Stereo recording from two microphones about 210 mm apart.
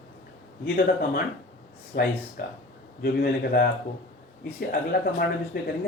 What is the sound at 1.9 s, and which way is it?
Speech, 40° left (ahead or behind).